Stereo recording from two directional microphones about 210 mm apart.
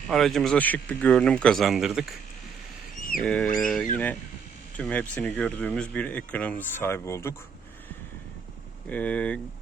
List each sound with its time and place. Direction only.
0.1 s speech: centre (ahead or behind)
3.2 s speech: 5° left (ahead or behind)
8.9 s speech: 5° left (ahead or behind)